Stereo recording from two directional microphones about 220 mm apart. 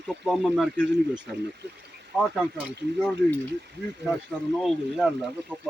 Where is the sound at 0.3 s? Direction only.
Centre (ahead or behind).